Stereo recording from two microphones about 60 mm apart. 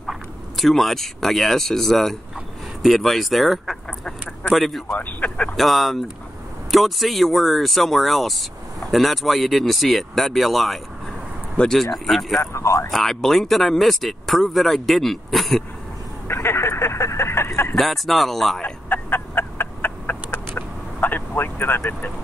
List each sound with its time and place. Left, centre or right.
0.0 s speech: centre
4.0 s duck: centre
4.6 s speech: centre
4.9 s speech: left
5.6 s speech: centre
12.4 s speech: left
12.9 s speech: centre
16.3 s a sound: left
17.7 s speech: centre
18.6 s a sound: left